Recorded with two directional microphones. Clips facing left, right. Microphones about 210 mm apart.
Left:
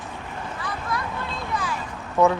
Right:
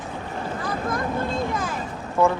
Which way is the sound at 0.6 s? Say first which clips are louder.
Right 4 dB; 45° right (ahead or behind).